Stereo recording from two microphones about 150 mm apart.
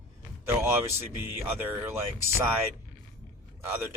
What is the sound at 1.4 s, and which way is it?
Speech, 15° right (ahead or behind).